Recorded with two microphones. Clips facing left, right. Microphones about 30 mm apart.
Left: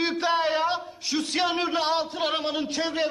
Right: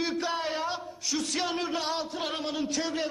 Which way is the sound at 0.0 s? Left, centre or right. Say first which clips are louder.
Left 6 dB; left.